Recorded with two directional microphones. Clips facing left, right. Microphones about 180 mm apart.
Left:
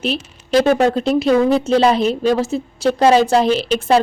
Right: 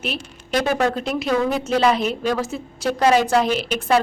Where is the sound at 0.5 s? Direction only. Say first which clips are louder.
Left 6 dB; 30° left (ahead or behind).